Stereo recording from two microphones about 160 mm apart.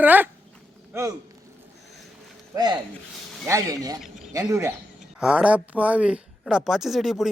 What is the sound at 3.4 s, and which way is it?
A man's voice, 20° right (ahead or behind).